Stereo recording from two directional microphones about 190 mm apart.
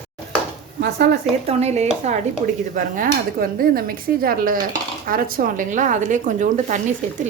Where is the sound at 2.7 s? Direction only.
45° right (ahead or behind).